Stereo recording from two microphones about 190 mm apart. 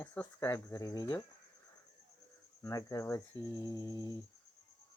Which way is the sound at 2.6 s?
15° left (ahead or behind).